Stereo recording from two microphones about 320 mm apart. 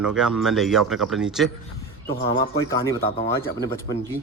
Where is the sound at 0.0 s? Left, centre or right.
Centre.